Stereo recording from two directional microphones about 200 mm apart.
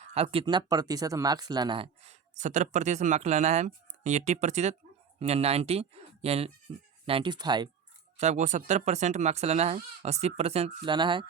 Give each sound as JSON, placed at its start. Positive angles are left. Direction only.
{"t": 0.0, "sound": "speech", "side_deg": -30}
{"t": 8.2, "sound": "speech", "side_deg": -35}